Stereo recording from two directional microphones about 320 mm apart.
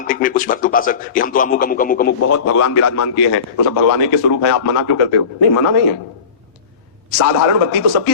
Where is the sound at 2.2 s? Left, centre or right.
Left.